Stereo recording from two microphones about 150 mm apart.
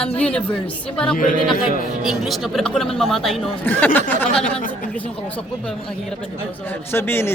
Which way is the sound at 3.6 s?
10° left (ahead or behind).